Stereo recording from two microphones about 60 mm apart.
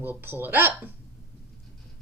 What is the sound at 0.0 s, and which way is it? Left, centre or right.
Speech, right.